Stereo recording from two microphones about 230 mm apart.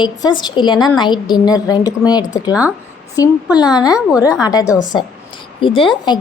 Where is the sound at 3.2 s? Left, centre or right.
Centre.